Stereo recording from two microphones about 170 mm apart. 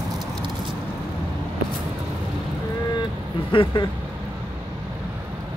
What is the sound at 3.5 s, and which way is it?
Speech, 30° left (ahead or behind).